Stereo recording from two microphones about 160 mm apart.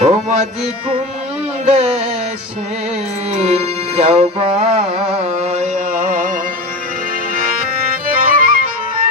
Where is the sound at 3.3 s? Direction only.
45° right (ahead or behind).